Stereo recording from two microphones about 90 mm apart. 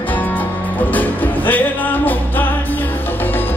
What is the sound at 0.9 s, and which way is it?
Music, 20° left (ahead or behind).